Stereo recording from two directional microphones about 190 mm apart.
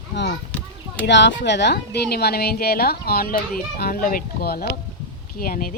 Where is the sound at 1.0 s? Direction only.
65° left (ahead or behind).